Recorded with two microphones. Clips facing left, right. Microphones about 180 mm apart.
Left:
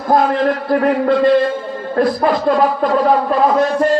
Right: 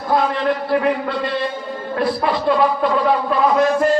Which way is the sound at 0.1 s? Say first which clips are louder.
Left 4 dB; 45° left (ahead or behind).